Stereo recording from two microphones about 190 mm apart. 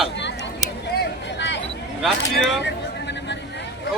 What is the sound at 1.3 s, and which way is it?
Chatter, 70° left (ahead or behind).